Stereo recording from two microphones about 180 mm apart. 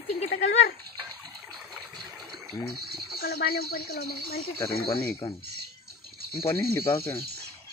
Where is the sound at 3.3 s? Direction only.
60° left (ahead or behind).